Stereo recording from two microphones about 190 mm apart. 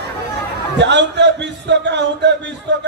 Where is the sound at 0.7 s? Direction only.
65° right (ahead or behind).